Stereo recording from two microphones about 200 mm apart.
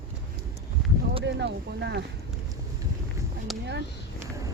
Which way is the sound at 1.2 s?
60° right (ahead or behind).